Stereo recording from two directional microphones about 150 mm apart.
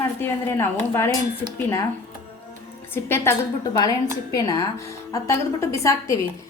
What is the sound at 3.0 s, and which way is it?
A woman's voice, 15° left (ahead or behind).